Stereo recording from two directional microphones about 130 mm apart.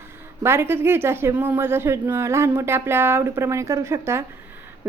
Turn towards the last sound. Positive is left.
turn(degrees=-20)  # may be behind; listen again after turning